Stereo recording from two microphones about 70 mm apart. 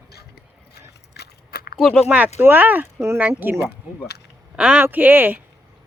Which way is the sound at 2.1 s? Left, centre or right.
Right.